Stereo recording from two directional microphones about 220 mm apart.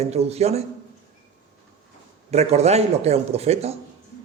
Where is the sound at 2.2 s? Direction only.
30° right (ahead or behind).